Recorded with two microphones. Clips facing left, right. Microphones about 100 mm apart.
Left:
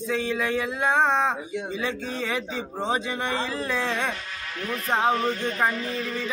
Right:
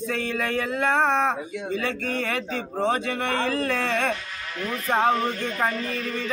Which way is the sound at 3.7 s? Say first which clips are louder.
Right 2 dB; 55° right (ahead or behind).